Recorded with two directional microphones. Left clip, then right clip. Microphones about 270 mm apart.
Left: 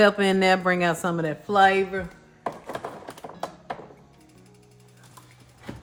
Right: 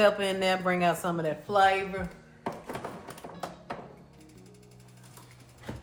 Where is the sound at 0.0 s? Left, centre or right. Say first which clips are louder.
Left 5 dB; left.